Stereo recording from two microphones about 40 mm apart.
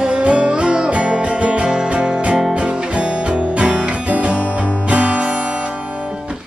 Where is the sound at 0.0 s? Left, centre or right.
Right.